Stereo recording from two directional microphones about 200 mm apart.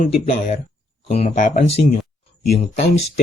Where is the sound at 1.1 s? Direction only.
30° left (ahead or behind).